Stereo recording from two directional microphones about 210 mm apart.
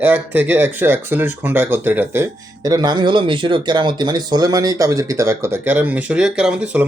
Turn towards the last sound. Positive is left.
turn(degrees=-5)  # may be behind; listen again after turning